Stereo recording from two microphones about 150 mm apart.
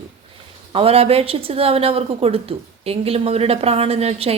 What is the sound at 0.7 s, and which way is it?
A woman's voice, 40° right (ahead or behind).